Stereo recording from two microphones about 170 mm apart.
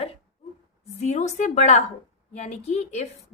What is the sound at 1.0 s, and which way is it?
A woman's voice, 45° left (ahead or behind).